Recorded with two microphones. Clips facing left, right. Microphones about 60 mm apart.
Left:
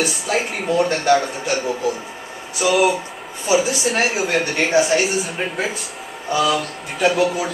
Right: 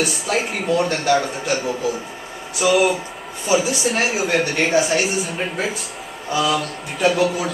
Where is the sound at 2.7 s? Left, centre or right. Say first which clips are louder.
Left 1 dB; centre.